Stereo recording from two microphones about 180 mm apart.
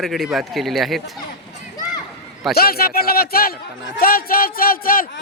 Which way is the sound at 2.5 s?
60° left (ahead or behind).